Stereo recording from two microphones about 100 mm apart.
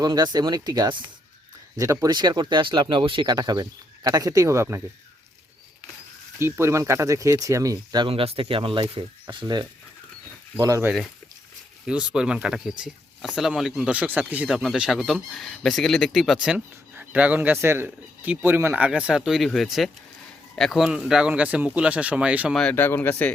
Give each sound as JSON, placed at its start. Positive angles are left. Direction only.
{"t": 0.0, "sound": "speech", "side_deg": -45}
{"t": 1.7, "sound": "speech", "side_deg": -35}
{"t": 2.0, "sound": "speech", "side_deg": -45}
{"t": 3.2, "sound": "speech", "side_deg": -40}
{"t": 6.4, "sound": "speech", "side_deg": -25}
{"t": 8.0, "sound": "speech", "side_deg": -75}
{"t": 9.3, "sound": "speech", "side_deg": -50}
{"t": 11.9, "sound": "speech", "side_deg": -10}
{"t": 16.9, "sound": "speech", "side_deg": -15}
{"t": 22.7, "sound": "speech", "side_deg": 20}